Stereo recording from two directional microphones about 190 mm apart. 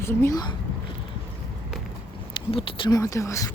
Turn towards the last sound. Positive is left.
turn(degrees=15)  # may be behind; listen again after turning